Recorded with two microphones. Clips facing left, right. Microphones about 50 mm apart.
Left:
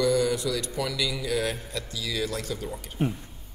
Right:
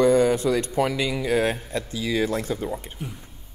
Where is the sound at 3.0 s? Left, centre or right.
Left.